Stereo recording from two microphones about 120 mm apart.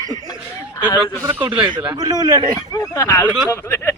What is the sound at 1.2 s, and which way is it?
Speech, 40° right (ahead or behind).